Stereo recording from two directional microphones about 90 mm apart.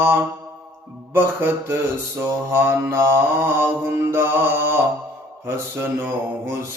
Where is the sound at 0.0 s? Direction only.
30° right (ahead or behind).